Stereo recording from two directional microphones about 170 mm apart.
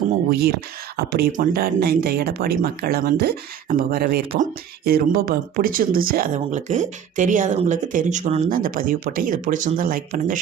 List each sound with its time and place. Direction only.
0.3 s speech: 65° right (ahead or behind)